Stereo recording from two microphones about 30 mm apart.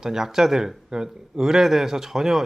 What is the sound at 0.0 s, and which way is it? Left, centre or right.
A man's voice, centre.